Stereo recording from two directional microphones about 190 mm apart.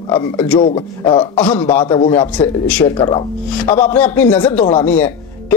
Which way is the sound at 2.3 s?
5° left (ahead or behind).